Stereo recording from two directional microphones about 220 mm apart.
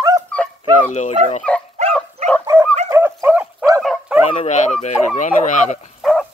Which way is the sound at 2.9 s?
10° right (ahead or behind).